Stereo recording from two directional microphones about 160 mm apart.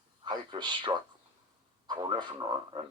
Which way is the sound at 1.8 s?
30° right (ahead or behind).